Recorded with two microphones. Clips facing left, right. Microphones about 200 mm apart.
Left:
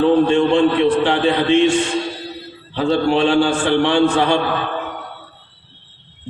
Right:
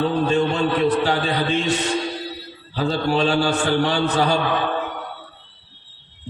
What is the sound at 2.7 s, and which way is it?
A man's voice, 40° right (ahead or behind).